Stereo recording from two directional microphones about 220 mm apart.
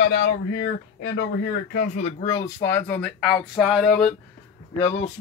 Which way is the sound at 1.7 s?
30° left (ahead or behind).